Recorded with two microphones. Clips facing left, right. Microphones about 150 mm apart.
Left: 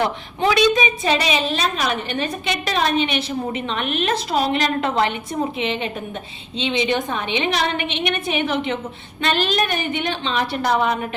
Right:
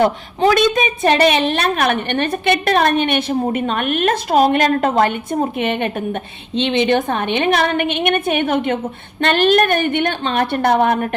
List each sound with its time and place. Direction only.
0.0 s a woman's voice: 45° right (ahead or behind)